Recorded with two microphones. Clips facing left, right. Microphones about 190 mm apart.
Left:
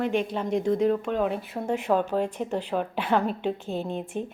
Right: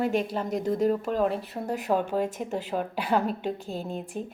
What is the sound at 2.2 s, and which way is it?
Speech, 45° right (ahead or behind).